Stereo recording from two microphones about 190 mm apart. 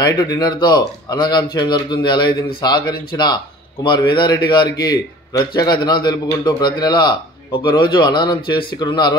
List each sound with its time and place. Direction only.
0.0 s a man's voice: 20° left (ahead or behind)